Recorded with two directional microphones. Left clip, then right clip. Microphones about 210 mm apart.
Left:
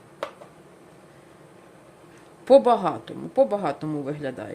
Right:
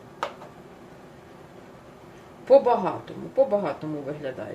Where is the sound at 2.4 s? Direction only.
55° left (ahead or behind).